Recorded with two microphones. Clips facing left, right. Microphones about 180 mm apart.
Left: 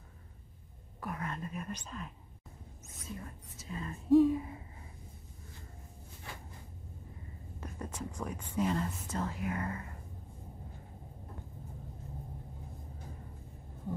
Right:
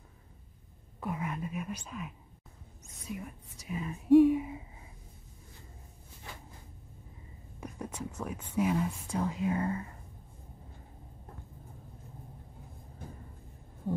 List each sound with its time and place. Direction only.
1.0 s speech: 15° right (ahead or behind)
7.6 s a sound: 10° right (ahead or behind)
8.5 s speech: 10° right (ahead or behind)
9.4 s speech: 25° right (ahead or behind)